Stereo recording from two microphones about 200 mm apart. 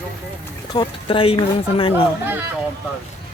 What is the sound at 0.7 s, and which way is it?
Speech, 25° left (ahead or behind).